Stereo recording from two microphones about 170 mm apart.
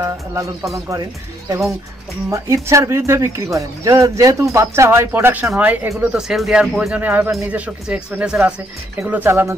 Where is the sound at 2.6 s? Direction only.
15° right (ahead or behind).